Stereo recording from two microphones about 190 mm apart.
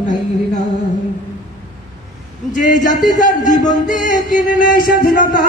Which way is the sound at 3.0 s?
40° left (ahead or behind).